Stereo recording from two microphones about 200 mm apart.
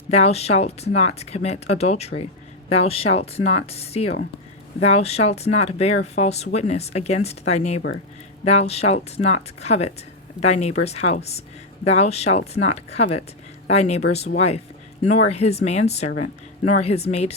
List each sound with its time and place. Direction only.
0.1 s speech: 30° left (ahead or behind)